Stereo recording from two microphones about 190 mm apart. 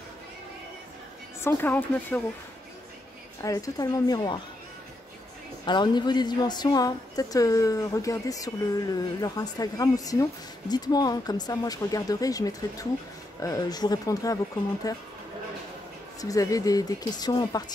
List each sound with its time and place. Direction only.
1.4 s speech: 10° left (ahead or behind)
3.4 s a woman's voice: 20° left (ahead or behind)
5.7 s a woman's voice: 25° left (ahead or behind)
16.2 s a woman's voice: 20° left (ahead or behind)